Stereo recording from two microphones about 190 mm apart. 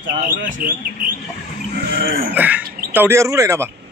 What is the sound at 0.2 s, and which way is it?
Speech, 45° right (ahead or behind).